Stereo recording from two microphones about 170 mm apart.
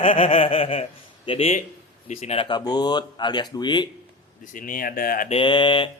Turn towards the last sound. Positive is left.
turn(degrees=30)  # may be behind; listen again after turning